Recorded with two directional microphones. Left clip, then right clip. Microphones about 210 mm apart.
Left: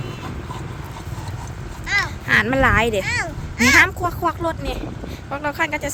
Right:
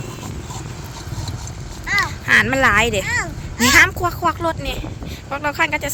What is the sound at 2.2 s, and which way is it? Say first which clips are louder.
Speech: right 3 dB; 5° left (ahead or behind).